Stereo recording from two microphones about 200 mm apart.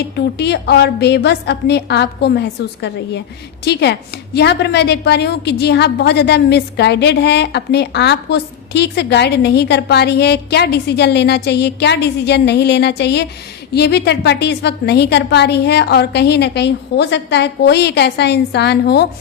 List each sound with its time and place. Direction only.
0.2 s a woman's voice: 55° left (ahead or behind)